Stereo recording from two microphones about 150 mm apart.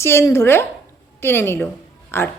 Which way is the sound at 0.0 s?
15° left (ahead or behind).